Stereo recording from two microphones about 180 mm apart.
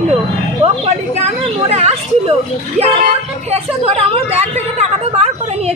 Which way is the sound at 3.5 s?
30° right (ahead or behind).